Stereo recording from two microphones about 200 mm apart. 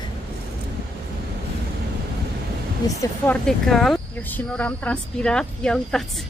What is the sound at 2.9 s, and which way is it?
Speech, 15° left (ahead or behind).